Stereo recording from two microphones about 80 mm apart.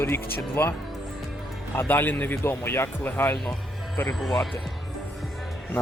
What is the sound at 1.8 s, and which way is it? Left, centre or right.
Speech, left.